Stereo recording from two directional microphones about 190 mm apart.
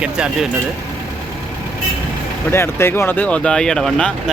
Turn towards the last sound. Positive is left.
turn(degrees=5)  # may be behind; listen again after turning